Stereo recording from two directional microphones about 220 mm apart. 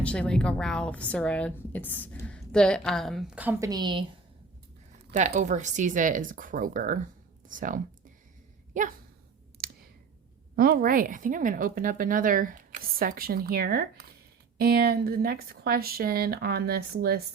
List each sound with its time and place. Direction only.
0.0 s speech: 5° left (ahead or behind); by 4.0 s 20° right (ahead or behind)
5.1 s speech: 35° right (ahead or behind)
10.5 s speech: 45° right (ahead or behind)